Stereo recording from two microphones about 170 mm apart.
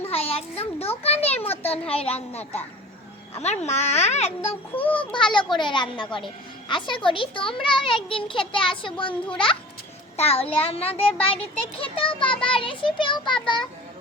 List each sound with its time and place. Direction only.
0.0 s a child's voice: 35° left (ahead or behind)
4.4 s a child's voice: 10° left (ahead or behind)
5.1 s a child's voice: 30° left (ahead or behind)